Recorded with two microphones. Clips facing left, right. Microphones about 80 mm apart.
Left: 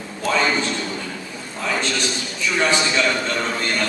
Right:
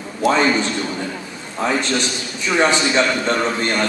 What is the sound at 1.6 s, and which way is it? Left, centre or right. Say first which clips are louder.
A man's voice: right 4 dB; right.